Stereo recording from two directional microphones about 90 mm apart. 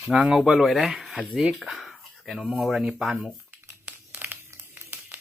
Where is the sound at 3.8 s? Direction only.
15° right (ahead or behind).